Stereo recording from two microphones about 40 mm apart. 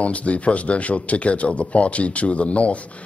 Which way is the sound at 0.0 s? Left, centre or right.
Left.